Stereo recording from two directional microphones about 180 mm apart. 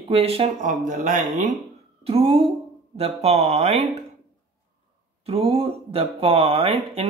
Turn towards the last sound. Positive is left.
turn(degrees=-30)  # may be behind; listen again after turning